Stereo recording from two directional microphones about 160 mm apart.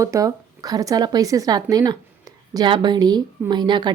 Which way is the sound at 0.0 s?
20° right (ahead or behind).